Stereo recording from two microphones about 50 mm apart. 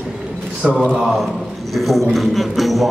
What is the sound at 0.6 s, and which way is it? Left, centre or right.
Speech, centre.